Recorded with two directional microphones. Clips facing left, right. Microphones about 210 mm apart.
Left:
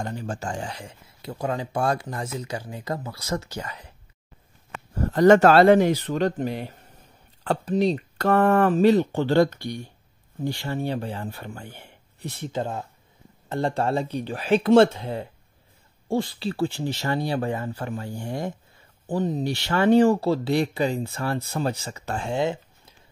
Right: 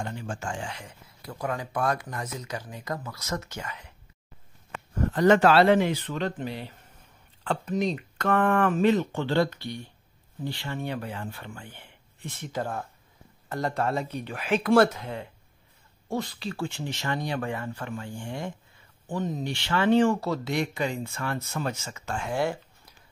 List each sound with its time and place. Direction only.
0.0 s speech: 40° left (ahead or behind)
4.9 s speech: 40° left (ahead or behind)
7.4 s speech: 35° left (ahead or behind)
12.5 s speech: 20° left (ahead or behind)
22.3 s a sound: 20° left (ahead or behind)